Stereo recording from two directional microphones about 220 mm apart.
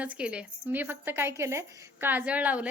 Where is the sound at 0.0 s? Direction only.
5° right (ahead or behind).